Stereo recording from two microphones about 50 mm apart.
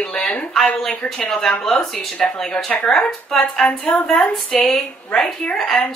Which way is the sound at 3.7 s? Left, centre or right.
Left.